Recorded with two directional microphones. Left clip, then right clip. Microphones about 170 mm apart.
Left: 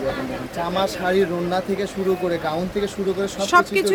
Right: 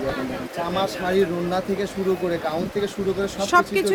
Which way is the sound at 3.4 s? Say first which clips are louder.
Left 2 dB; centre (ahead or behind).